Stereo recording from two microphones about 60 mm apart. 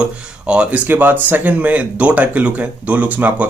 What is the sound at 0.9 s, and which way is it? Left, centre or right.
Speech, right.